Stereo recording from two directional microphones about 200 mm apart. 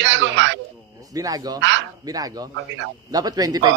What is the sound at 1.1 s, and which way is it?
Speech, 20° right (ahead or behind).